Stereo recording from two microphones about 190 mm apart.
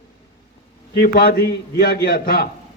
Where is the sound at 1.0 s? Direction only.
55° left (ahead or behind).